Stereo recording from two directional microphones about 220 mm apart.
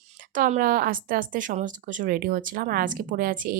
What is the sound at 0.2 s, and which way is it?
Speech, 35° right (ahead or behind).